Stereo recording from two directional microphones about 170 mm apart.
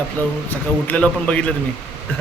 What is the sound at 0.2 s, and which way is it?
A man's voice, 10° left (ahead or behind).